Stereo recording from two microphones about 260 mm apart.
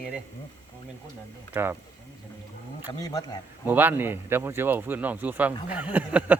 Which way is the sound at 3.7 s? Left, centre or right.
Centre.